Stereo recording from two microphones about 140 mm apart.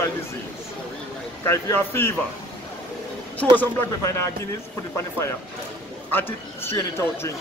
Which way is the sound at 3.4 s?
5° left (ahead or behind).